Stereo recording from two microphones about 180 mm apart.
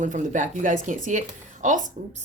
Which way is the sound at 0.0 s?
45° right (ahead or behind).